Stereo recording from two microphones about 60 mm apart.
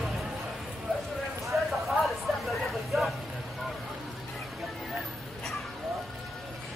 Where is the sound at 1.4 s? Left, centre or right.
Centre.